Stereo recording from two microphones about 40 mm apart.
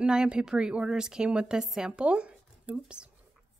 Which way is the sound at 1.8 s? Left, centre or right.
Right.